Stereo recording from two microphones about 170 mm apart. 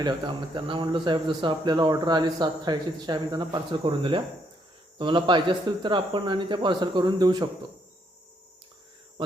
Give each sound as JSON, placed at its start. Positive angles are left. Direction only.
{"t": 0.0, "sound": "speech", "side_deg": -30}